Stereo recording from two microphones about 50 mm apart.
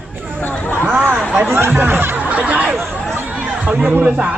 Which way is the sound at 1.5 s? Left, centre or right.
Right.